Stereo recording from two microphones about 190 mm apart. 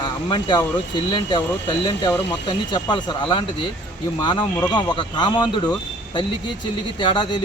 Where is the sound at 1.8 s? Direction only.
25° left (ahead or behind).